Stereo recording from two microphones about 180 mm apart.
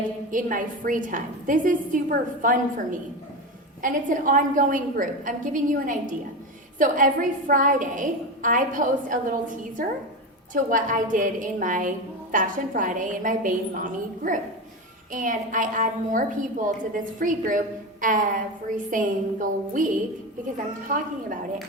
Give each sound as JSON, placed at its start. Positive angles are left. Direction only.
{"t": 0.3, "sound": "a woman's voice", "side_deg": -45}
{"t": 15.1, "sound": "a woman's voice", "side_deg": -45}